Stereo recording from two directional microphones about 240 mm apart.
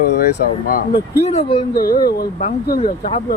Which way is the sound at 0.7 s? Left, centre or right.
Left.